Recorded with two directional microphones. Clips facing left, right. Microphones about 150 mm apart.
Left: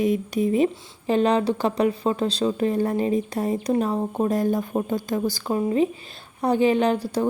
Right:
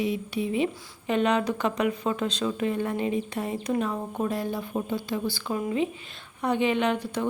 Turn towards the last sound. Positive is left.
turn(degrees=35)  # may be behind; listen again after turning